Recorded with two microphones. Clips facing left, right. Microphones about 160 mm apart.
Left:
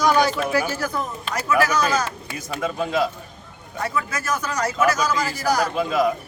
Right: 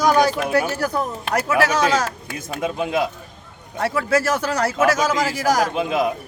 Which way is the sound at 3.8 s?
75° right (ahead or behind).